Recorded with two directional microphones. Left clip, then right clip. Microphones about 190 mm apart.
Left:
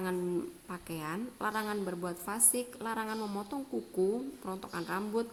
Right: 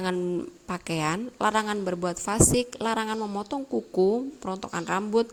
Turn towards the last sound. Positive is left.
turn(degrees=-35)  # may be behind; listen again after turning